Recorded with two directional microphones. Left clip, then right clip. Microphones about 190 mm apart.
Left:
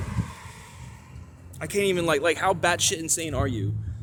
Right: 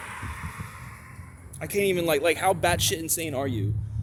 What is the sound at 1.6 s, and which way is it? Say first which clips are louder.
Speech: even; centre (ahead or behind).